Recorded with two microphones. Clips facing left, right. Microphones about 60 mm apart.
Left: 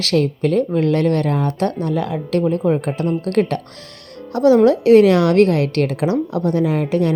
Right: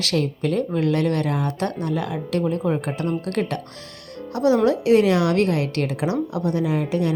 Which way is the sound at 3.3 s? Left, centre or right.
Left.